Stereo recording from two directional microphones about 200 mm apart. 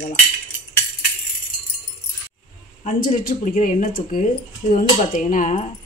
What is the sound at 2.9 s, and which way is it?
Speech, 45° left (ahead or behind).